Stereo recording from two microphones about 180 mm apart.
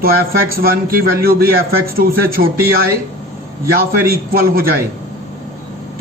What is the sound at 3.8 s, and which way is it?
Speech, 55° right (ahead or behind).